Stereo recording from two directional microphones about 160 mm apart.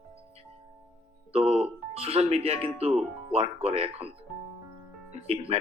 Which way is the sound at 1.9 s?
40° right (ahead or behind).